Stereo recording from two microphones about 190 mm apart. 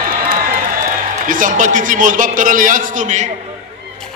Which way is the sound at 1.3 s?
45° right (ahead or behind).